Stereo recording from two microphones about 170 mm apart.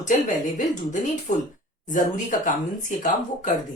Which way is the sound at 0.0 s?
45° left (ahead or behind).